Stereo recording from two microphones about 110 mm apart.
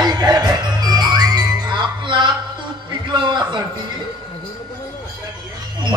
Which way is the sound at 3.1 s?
45° right (ahead or behind).